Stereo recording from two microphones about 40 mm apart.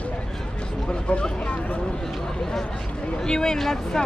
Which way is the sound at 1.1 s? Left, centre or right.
Left.